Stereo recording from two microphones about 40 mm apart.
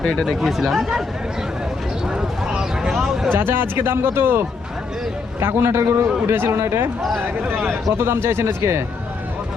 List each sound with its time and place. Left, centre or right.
0.0 s speech: centre
0.3 s speech: centre
2.0 s a sound: centre
3.3 s a man's voice: right
7.9 s speech: right